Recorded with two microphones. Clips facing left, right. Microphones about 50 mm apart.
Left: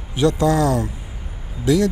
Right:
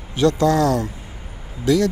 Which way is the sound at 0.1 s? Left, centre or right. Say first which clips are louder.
Right 1 dB; left.